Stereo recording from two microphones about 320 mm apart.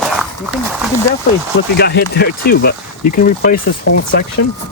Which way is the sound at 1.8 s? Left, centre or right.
Left.